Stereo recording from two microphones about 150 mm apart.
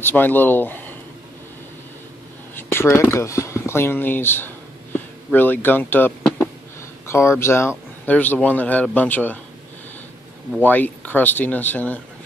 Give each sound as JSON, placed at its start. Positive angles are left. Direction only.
{"t": 0.0, "sound": "speech", "side_deg": 15}
{"t": 2.5, "sound": "speech", "side_deg": 15}
{"t": 10.6, "sound": "speech", "side_deg": 10}